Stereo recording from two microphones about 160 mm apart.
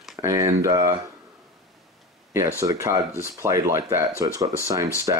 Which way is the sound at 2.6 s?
20° right (ahead or behind).